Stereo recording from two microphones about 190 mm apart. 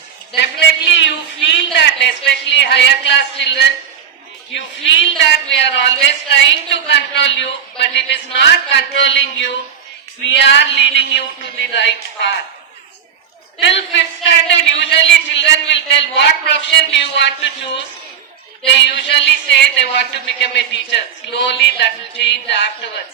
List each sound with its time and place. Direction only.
0.9 s speech: 70° left (ahead or behind)
13.6 s speech: 70° left (ahead or behind)
18.7 s speech: 65° left (ahead or behind)